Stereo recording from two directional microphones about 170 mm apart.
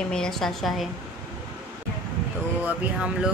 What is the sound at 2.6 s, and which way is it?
Speech, 5° right (ahead or behind).